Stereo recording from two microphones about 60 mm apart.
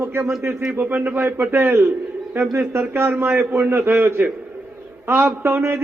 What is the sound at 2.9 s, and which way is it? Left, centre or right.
A man's voice, right.